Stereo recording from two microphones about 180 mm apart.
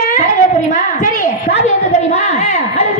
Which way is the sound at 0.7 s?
45° left (ahead or behind).